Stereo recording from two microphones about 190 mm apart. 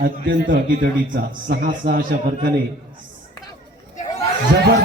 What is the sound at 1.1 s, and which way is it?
A man's voice, 50° right (ahead or behind).